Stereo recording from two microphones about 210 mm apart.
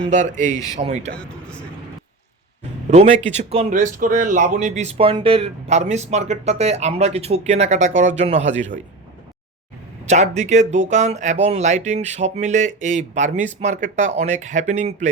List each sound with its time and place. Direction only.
0.1 s speech: 35° right (ahead or behind)
1.1 s a sound: 5° left (ahead or behind)
2.9 s speech: 30° right (ahead or behind)
10.1 s speech: 35° right (ahead or behind)